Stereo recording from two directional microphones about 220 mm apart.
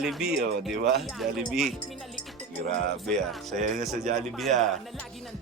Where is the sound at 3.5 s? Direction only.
40° right (ahead or behind).